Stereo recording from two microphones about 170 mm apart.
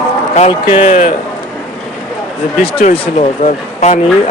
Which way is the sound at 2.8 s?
45° left (ahead or behind).